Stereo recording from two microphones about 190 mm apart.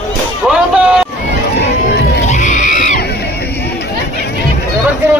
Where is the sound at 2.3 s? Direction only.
40° left (ahead or behind).